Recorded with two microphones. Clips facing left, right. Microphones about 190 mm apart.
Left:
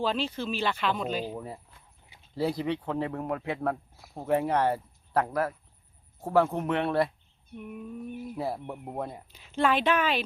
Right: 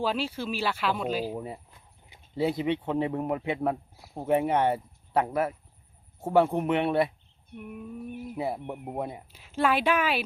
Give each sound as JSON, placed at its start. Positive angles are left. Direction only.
{"t": 0.0, "sound": "speech", "side_deg": -10}
{"t": 2.4, "sound": "speech", "side_deg": -25}
{"t": 6.4, "sound": "speech", "side_deg": -15}
{"t": 7.5, "sound": "a sound", "side_deg": -5}
{"t": 8.4, "sound": "speech", "side_deg": -20}
{"t": 8.8, "sound": "speech", "side_deg": -5}